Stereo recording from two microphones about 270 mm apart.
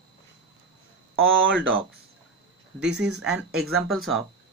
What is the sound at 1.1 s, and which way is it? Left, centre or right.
Speech, right.